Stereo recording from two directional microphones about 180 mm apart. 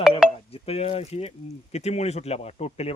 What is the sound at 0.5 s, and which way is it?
Speech, 35° left (ahead or behind).